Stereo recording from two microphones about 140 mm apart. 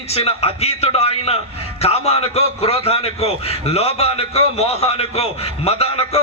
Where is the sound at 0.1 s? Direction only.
45° left (ahead or behind).